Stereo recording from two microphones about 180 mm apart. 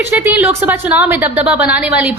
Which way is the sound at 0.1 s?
10° right (ahead or behind).